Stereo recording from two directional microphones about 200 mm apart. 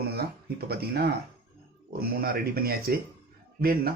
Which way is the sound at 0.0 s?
50° right (ahead or behind).